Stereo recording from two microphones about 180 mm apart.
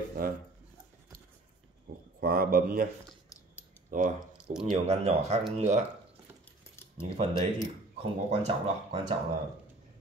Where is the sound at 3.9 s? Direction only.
45° right (ahead or behind).